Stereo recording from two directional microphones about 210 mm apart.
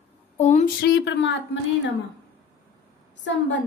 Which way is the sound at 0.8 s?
50° left (ahead or behind).